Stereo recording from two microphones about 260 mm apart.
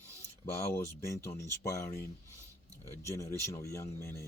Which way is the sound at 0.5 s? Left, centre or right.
Centre.